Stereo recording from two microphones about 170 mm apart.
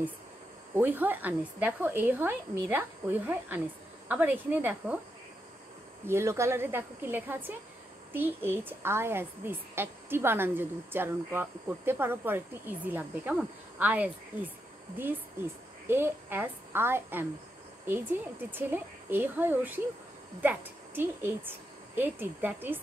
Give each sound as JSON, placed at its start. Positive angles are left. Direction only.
{"t": 0.7, "sound": "speech", "side_deg": -10}
{"t": 6.0, "sound": "speech", "side_deg": -15}
{"t": 15.9, "sound": "speech", "side_deg": -10}